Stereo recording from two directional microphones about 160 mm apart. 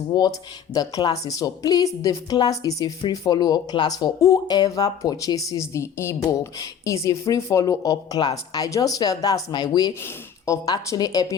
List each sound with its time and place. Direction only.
0.1 s a woman's voice: 25° left (ahead or behind)